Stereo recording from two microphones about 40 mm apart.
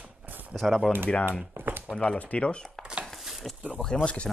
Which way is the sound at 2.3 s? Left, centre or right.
Left.